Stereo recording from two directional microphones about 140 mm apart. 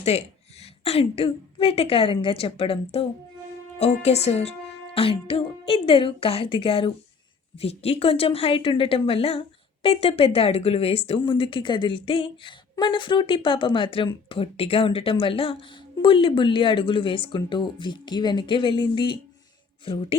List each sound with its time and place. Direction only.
0.0 s a woman's voice: 50° left (ahead or behind)